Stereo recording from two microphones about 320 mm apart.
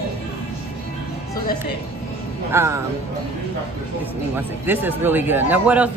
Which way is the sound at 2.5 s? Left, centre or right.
Centre.